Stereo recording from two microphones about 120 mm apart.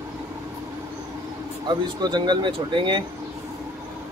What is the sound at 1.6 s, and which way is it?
Speech, 35° right (ahead or behind).